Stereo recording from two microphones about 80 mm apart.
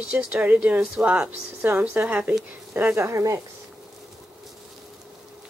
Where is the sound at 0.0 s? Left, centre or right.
Centre.